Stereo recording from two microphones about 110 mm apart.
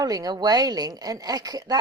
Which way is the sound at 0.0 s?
35° right (ahead or behind).